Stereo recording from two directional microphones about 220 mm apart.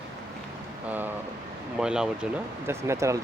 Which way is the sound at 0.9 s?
10° right (ahead or behind).